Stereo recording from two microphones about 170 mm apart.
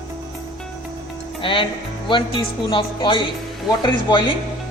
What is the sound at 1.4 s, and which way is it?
A woman's voice, 30° left (ahead or behind).